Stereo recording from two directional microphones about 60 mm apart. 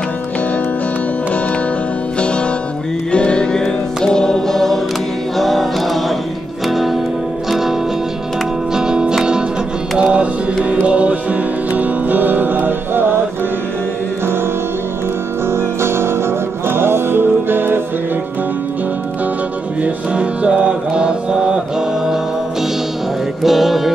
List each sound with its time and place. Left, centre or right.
2.1 s music: centre
8.7 s music: centre
9.9 s mantra: centre
11.7 s music: right
15.5 s music: right
19.8 s music: right; by 23.9 s centre